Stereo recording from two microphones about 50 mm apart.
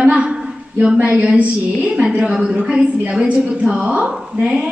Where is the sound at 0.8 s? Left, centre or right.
Right.